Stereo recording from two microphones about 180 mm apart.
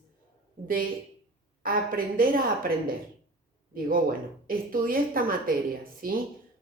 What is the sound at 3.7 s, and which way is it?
Speech, 50° right (ahead or behind).